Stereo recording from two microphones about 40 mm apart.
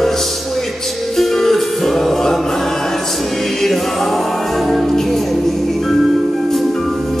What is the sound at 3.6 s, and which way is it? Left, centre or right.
Music, centre.